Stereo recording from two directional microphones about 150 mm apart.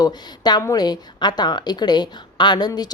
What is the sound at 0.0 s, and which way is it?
A woman's voice, 25° left (ahead or behind).